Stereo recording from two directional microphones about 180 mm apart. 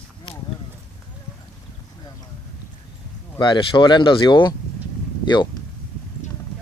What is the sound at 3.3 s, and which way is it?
Speech, 25° left (ahead or behind).